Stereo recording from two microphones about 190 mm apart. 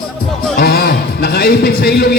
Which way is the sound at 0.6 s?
50° left (ahead or behind).